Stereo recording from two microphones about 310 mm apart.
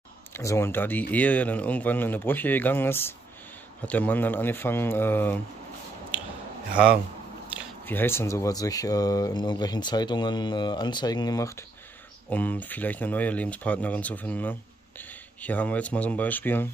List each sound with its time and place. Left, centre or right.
0.3 s speech: centre
7.8 s speech: centre